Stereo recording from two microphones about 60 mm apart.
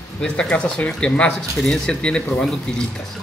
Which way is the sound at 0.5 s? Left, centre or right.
Left.